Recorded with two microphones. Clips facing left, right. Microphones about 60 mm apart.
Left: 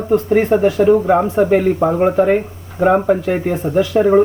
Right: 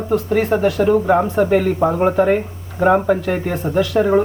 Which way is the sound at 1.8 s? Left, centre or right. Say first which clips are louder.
Left 2 dB; centre.